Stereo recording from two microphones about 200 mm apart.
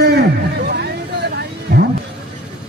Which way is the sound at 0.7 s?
55° right (ahead or behind).